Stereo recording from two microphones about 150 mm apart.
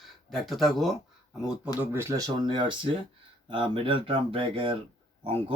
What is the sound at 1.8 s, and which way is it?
Speech, 15° right (ahead or behind).